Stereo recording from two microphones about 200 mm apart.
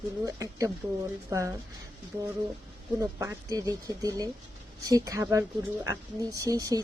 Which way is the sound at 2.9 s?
15° right (ahead or behind).